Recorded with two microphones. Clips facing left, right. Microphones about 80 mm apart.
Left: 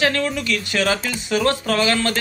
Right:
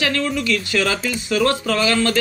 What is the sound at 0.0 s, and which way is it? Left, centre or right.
Speech, left.